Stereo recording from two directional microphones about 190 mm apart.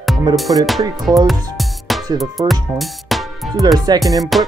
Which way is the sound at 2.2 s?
Centre (ahead or behind).